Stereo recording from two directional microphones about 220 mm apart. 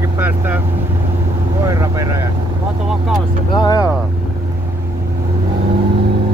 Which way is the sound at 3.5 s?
20° left (ahead or behind).